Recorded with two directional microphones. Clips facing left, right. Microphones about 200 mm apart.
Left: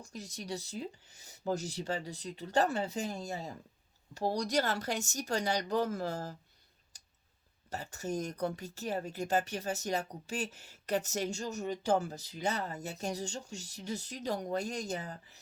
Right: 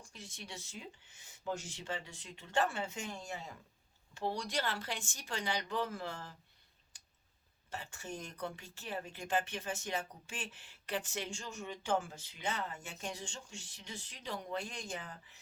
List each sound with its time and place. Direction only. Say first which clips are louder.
0.0 s speech: left 7 dB; 40° left (ahead or behind)
6.9 s clicking: left 2 dB; 40° left (ahead or behind)
7.7 s speech: left 8 dB; 40° left (ahead or behind)